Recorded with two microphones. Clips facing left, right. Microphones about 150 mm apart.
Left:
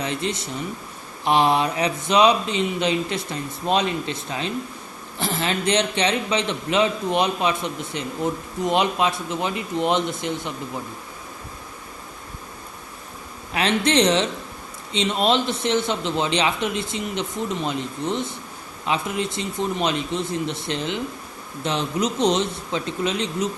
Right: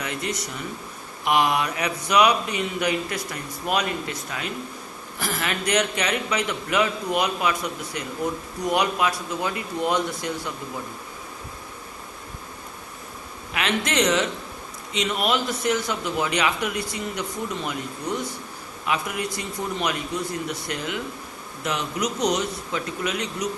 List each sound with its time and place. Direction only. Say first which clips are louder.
0.0 s a man's voice: left 3 dB; 30° left (ahead or behind)
13.5 s a man's voice: left 5 dB; 30° left (ahead or behind)